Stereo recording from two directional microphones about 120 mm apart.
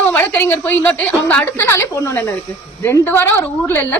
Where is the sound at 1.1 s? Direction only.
5° left (ahead or behind).